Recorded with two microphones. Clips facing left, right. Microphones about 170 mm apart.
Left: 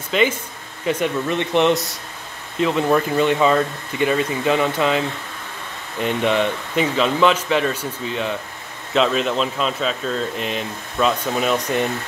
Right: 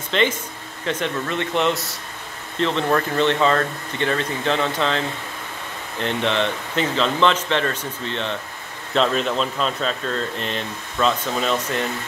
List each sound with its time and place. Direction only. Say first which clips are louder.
0.1 s speech: left 2 dB; 10° left (ahead or behind)